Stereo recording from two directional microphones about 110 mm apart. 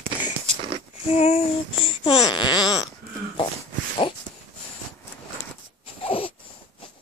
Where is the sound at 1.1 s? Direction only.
70° left (ahead or behind).